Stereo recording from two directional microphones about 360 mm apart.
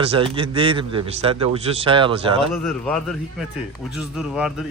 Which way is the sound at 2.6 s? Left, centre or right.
Centre.